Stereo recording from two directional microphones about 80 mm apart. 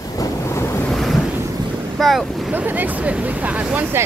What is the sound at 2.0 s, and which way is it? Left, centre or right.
Speech, centre.